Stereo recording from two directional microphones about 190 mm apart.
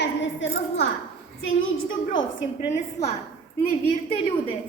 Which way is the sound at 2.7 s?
35° left (ahead or behind).